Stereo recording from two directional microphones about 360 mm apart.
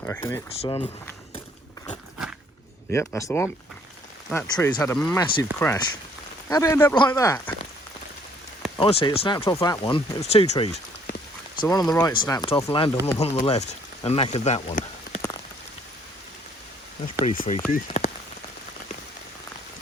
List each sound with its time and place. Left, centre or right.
0.0 s speech: centre
2.9 s speech: centre
8.8 s speech: centre
17.2 s speech: centre